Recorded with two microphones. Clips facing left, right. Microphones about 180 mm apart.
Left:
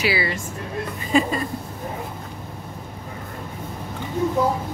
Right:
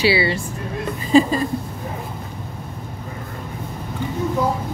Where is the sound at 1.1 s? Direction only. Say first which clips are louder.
Right 6 dB; 30° right (ahead or behind).